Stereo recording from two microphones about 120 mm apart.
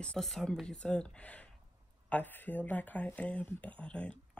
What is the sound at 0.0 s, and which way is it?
Speech, 5° left (ahead or behind).